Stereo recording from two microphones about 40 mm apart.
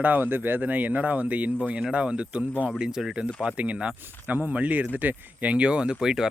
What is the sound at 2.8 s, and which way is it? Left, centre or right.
Speech, centre.